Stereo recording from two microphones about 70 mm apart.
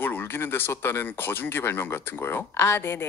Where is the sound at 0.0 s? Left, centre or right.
Left.